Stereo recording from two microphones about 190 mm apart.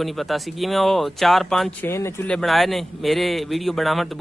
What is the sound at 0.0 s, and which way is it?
A man's voice, centre (ahead or behind).